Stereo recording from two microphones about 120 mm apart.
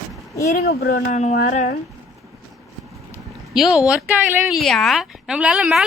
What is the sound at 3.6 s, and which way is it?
A woman's voice, 5° right (ahead or behind).